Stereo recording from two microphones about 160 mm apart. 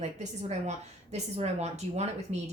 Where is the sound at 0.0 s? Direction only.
45° right (ahead or behind).